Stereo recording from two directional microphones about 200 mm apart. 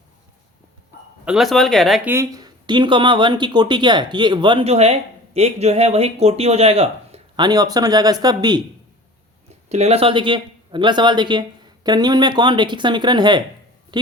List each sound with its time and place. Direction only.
1.2 s speech: 5° right (ahead or behind)
2.0 s speech: 15° right (ahead or behind)
9.6 s speech: 35° right (ahead or behind)